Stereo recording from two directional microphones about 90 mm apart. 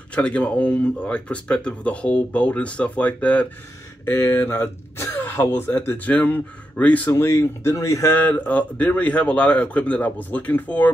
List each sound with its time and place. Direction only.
0.1 s speech: 15° left (ahead or behind)